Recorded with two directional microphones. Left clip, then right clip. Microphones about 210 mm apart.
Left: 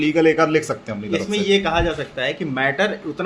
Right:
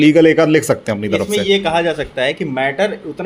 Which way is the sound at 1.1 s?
15° right (ahead or behind).